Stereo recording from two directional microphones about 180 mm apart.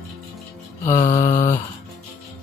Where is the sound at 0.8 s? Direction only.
15° left (ahead or behind).